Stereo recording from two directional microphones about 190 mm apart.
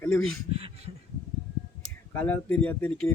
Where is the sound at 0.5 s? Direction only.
30° right (ahead or behind).